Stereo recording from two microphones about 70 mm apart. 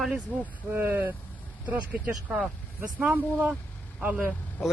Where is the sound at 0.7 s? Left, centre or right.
Right; by 4.7 s centre.